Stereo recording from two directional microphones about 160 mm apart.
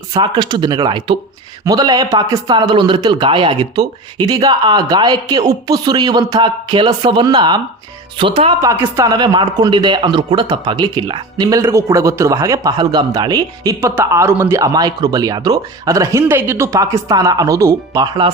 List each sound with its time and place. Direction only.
0.1 s speech: 25° right (ahead or behind)
8.6 s speech: 15° right (ahead or behind)